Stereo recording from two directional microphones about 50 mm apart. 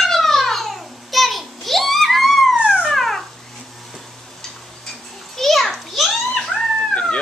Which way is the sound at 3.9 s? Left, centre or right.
Centre.